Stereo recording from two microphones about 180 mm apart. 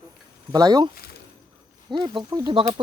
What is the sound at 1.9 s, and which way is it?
Speech, 25° right (ahead or behind).